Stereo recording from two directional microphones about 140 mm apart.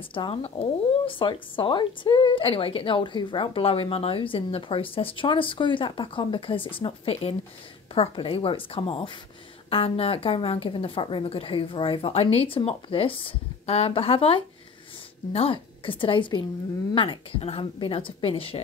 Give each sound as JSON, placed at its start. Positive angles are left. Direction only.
{"t": 0.1, "sound": "speech", "side_deg": 40}